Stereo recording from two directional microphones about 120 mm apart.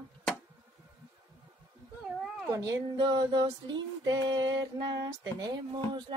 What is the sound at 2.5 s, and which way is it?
Music, 35° right (ahead or behind).